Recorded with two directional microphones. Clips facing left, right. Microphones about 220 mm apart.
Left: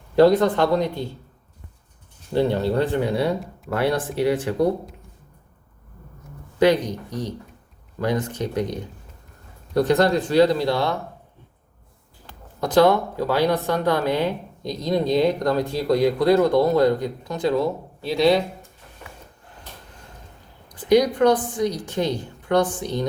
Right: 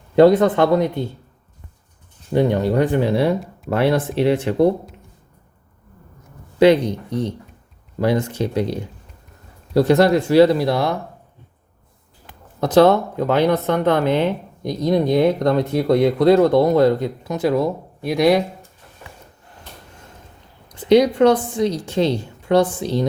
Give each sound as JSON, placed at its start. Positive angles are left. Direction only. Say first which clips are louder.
{"t": 0.2, "sound": "speech", "louder": "right 3 dB", "side_deg": -20}
{"t": 2.3, "sound": "speech", "louder": "right 3 dB", "side_deg": -15}
{"t": 3.0, "sound": "speech", "louder": "right 4 dB", "side_deg": -25}
{"t": 8.5, "sound": "speech", "louder": "right 3 dB", "side_deg": 15}
{"t": 9.7, "sound": "speech", "louder": "right 4 dB", "side_deg": -25}
{"t": 12.2, "sound": "speech", "louder": "right 4 dB", "side_deg": -20}
{"t": 20.7, "sound": "a woman's voice", "louder": "right 4 dB", "side_deg": -25}